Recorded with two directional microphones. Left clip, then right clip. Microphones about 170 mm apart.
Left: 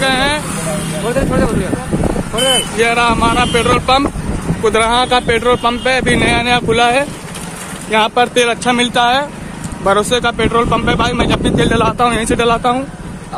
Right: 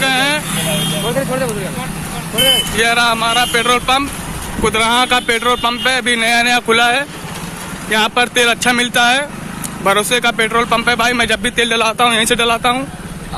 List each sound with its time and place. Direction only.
0.0 s vehicle: 5° left (ahead or behind)
2.8 s speech: 5° left (ahead or behind)